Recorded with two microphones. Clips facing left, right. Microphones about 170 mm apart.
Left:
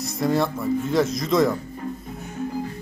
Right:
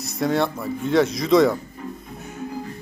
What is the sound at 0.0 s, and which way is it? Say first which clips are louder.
A man's voice: even; centre (ahead or behind).